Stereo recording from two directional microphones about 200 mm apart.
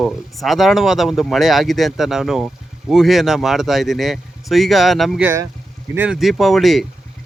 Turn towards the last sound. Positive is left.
turn(degrees=0)  # may be behind; listen again after turning